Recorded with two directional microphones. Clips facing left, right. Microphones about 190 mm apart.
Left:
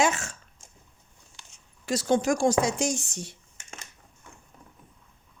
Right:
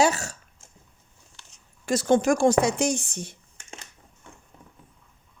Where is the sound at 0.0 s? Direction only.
40° right (ahead or behind).